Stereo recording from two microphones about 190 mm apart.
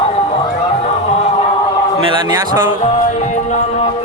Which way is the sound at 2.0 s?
25° right (ahead or behind).